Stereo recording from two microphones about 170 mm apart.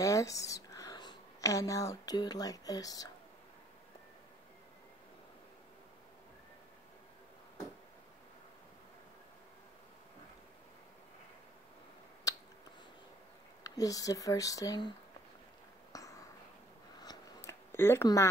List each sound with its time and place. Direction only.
0.0 s speech: 20° left (ahead or behind)
12.3 s finger snapping: 20° left (ahead or behind)
13.7 s speech: 20° left (ahead or behind)
15.9 s a sound: 20° left (ahead or behind)